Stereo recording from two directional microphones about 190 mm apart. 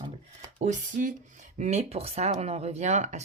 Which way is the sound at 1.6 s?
35° right (ahead or behind).